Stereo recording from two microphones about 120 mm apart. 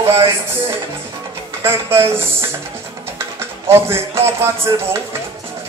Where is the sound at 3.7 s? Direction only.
20° right (ahead or behind).